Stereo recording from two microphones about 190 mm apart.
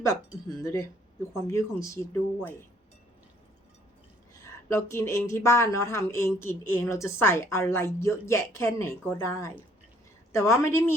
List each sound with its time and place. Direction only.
0.0 s speech: 15° left (ahead or behind)
4.7 s speech: 15° left (ahead or behind)